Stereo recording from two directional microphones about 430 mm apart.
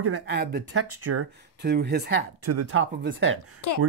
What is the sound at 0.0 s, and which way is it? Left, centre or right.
Speech, right.